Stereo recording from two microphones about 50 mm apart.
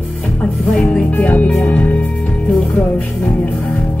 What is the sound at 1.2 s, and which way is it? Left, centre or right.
Music, left.